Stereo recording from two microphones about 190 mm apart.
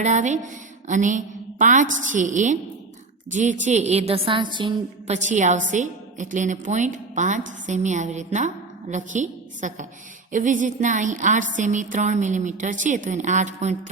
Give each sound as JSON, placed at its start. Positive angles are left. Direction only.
{"t": 0.0, "sound": "a woman's voice", "side_deg": -40}
{"t": 5.1, "sound": "a woman's voice", "side_deg": -40}